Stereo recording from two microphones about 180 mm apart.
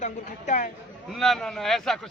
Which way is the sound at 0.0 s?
45° left (ahead or behind).